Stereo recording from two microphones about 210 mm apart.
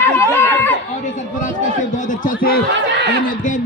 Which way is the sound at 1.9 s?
35° left (ahead or behind).